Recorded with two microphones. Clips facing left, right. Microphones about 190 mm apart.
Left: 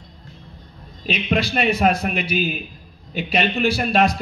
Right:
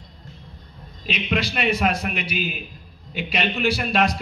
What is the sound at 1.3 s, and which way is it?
A man's voice, 45° left (ahead or behind).